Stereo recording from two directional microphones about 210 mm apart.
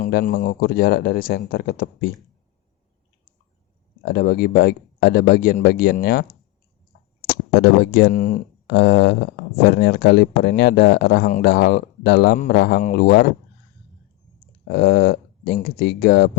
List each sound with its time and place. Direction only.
0.0 s speech: 45° left (ahead or behind)
4.0 s speech: 45° left (ahead or behind)
14.7 s speech: 50° left (ahead or behind)